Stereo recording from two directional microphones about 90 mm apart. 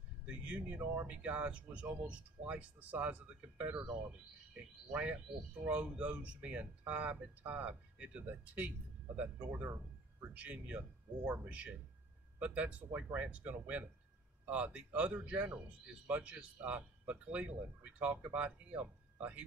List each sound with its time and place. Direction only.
0.5 s speech: 15° right (ahead or behind)
5.7 s speech: 15° right (ahead or behind)